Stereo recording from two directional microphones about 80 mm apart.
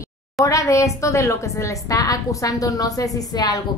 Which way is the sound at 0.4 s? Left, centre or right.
Left.